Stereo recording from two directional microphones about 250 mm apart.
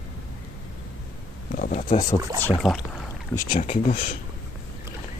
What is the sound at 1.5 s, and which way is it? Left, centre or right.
Speech, left.